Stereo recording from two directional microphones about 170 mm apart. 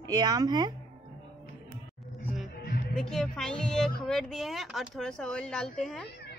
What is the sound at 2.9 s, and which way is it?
A woman's voice, 5° left (ahead or behind).